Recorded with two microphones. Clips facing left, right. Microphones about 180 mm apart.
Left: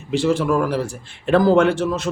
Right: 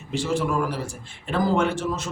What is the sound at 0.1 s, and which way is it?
A man's voice, 70° left (ahead or behind).